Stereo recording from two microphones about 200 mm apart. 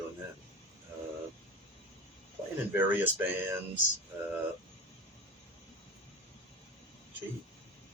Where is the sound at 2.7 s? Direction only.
10° right (ahead or behind).